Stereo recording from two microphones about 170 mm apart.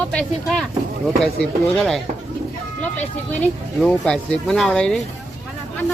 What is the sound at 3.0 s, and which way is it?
Speech, 5° left (ahead or behind).